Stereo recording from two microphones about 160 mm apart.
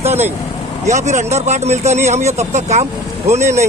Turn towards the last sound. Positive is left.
turn(degrees=-45)  # may be behind; listen again after turning